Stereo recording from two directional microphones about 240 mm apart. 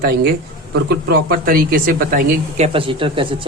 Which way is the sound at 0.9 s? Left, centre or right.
Right.